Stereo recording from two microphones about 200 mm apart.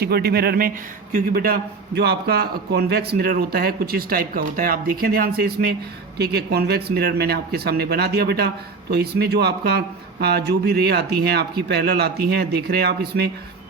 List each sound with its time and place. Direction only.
0.0 s a man's voice: 50° right (ahead or behind)